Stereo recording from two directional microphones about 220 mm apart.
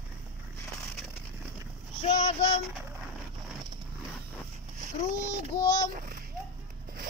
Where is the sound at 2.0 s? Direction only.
30° left (ahead or behind).